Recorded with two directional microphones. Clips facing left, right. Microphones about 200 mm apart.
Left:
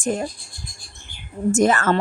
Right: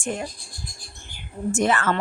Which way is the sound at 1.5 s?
40° left (ahead or behind).